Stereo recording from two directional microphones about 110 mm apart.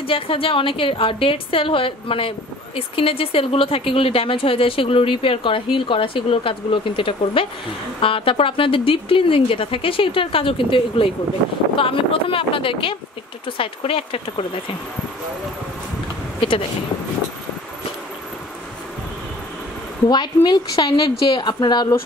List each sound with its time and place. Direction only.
0.0 s a woman's voice: 55° left (ahead or behind)
16.3 s a sound: 55° left (ahead or behind)
20.1 s a woman's voice: 40° left (ahead or behind)